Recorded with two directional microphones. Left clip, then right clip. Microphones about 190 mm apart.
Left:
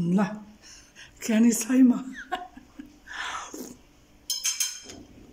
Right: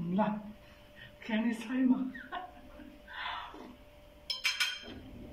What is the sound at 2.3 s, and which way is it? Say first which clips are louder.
Music: left 11 dB; 70° left (ahead or behind).